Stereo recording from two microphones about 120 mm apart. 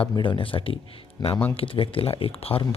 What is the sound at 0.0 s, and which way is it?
Speech, 45° left (ahead or behind).